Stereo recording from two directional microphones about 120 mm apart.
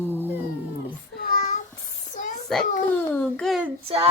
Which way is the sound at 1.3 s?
90° left.